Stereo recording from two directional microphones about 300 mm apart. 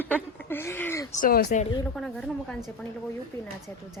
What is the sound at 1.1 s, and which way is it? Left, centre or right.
Speech, left.